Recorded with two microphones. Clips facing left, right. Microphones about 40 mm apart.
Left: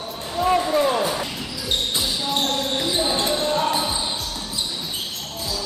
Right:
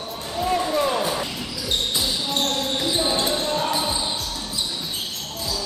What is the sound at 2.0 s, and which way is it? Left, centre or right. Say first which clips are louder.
Basketball bounce: left 1 dB; centre.